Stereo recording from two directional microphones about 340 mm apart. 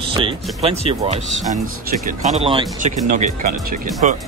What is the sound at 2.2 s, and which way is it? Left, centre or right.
Speech, centre.